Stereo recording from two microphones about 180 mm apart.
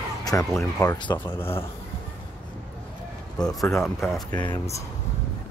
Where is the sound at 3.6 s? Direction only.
15° left (ahead or behind).